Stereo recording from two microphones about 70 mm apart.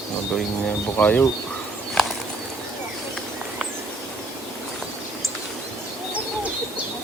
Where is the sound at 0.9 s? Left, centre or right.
Left.